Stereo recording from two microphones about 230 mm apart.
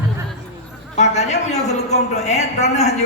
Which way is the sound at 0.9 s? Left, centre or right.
Left.